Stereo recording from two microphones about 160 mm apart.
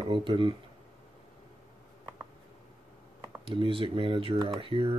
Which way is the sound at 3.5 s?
35° right (ahead or behind).